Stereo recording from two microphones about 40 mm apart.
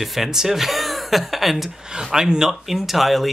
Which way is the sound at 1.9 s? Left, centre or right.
Centre.